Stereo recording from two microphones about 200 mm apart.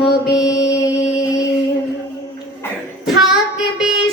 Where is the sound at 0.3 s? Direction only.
20° left (ahead or behind).